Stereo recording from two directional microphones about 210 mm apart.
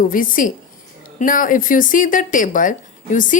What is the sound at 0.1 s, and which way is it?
Speech, 40° left (ahead or behind).